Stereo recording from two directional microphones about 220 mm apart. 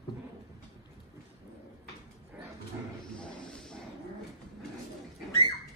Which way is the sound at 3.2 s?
5° left (ahead or behind).